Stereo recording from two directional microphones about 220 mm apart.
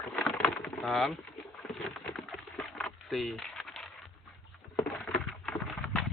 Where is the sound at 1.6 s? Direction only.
5° left (ahead or behind).